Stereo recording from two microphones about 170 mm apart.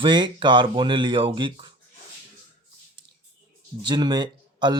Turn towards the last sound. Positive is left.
turn(degrees=-25)  # may be behind; listen again after turning